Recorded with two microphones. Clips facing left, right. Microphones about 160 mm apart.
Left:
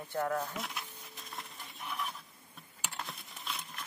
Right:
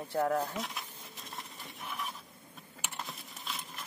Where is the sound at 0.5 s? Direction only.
Centre (ahead or behind).